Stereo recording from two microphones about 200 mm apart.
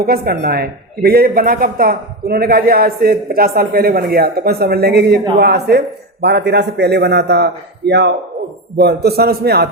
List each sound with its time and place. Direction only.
0.0 s a man's voice: 50° right (ahead or behind)